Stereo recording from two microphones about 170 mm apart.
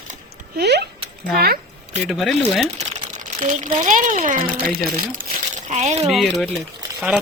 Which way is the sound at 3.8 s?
50° right (ahead or behind).